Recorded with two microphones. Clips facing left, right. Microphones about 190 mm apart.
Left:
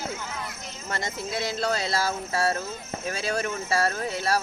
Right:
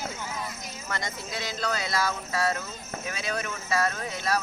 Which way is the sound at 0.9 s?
25° left (ahead or behind).